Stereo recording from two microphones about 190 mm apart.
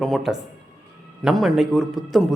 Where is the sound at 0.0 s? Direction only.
Centre (ahead or behind).